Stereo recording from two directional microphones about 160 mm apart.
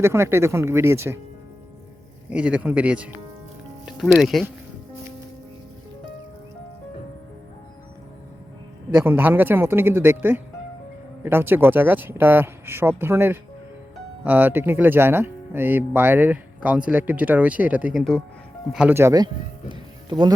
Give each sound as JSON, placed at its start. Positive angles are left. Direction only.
{"t": 0.0, "sound": "speech", "side_deg": -15}
{"t": 2.3, "sound": "speech", "side_deg": -5}
{"t": 8.9, "sound": "speech", "side_deg": -15}
{"t": 18.9, "sound": "speech", "side_deg": -20}